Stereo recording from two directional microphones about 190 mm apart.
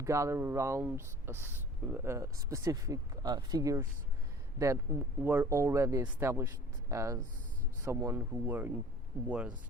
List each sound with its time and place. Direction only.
0.0 s speech: 15° right (ahead or behind)